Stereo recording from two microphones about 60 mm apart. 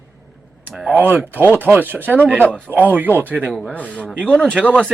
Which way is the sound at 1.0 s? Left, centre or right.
Right.